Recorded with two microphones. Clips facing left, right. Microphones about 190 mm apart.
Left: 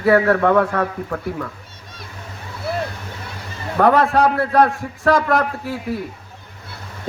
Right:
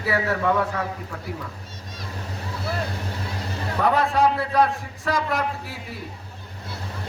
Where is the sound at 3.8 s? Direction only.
65° left (ahead or behind).